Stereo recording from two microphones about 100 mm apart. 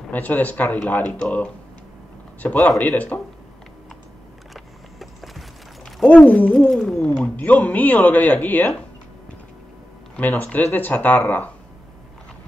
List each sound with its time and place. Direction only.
0.1 s speech: 15° left (ahead or behind)
4.6 s vehicle: centre (ahead or behind)
6.0 s speech: 10° left (ahead or behind)
7.1 s speech: 15° left (ahead or behind)
10.1 s speech: 15° left (ahead or behind)